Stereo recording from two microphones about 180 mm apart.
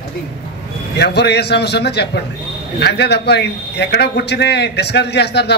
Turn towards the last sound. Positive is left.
turn(degrees=65)  # may be behind; listen again after turning